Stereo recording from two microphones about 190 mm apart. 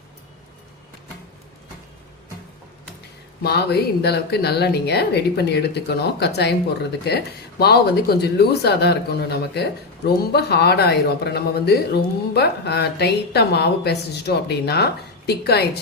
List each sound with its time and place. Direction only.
3.4 s speech: 60° left (ahead or behind)